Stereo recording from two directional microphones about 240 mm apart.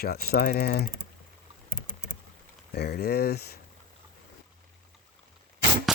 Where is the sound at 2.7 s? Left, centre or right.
Left.